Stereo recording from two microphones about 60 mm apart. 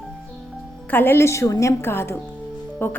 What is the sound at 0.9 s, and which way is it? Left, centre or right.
Speech, left.